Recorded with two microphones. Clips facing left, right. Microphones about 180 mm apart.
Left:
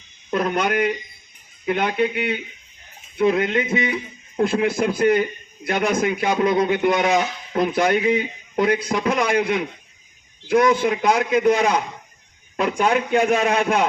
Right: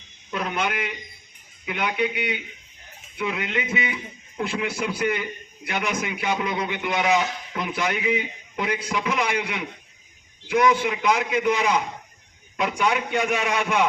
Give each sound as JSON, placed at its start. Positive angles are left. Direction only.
{"t": 0.3, "sound": "a man's voice", "side_deg": 45}